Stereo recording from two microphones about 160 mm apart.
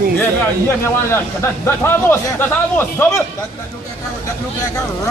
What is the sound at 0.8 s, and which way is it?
Speech, 15° left (ahead or behind).